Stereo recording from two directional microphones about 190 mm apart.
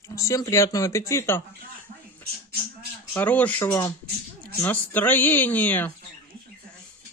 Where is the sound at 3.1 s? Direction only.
10° left (ahead or behind).